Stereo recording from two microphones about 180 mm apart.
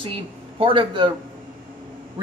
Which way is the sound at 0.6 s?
30° right (ahead or behind).